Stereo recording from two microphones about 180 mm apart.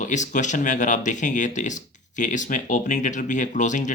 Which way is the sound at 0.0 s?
45° left (ahead or behind).